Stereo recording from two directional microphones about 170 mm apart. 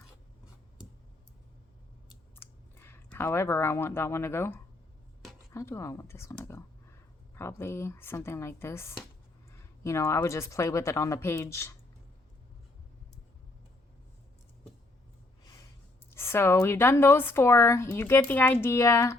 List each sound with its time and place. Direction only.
2.3 s a woman's voice: 15° left (ahead or behind)
16.0 s a woman's voice: 15° left (ahead or behind)